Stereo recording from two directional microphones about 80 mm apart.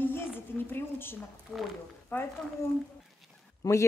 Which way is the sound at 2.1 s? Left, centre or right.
Left.